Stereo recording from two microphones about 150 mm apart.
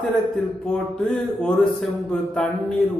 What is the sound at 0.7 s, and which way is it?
A man's voice, 5° left (ahead or behind).